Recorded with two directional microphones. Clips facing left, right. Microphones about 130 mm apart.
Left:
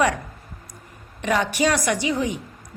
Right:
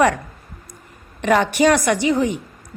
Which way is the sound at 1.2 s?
55° right (ahead or behind).